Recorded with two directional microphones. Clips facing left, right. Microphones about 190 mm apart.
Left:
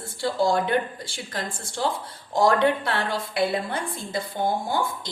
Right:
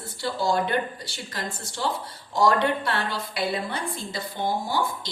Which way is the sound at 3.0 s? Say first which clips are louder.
Left 4 dB; 50° left (ahead or behind).